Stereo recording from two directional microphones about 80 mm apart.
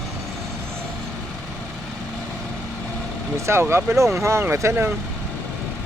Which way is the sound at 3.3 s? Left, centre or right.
Right.